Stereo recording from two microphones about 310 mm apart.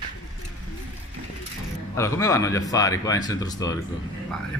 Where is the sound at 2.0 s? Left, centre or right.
Centre.